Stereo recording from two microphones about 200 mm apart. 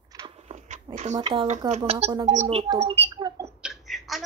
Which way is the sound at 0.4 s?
35° right (ahead or behind).